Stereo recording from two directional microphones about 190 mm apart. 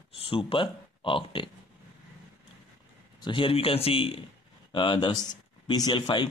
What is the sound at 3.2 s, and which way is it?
Speech, 25° left (ahead or behind).